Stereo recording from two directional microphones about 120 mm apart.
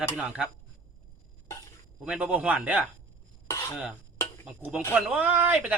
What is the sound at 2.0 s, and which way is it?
Speech, 10° right (ahead or behind).